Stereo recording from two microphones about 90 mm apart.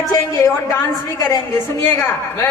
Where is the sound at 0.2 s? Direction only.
35° left (ahead or behind).